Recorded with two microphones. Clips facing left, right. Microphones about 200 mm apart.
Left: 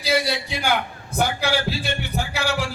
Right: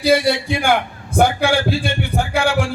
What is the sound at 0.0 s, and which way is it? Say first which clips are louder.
A man's voice: right 7 dB; 55° right (ahead or behind).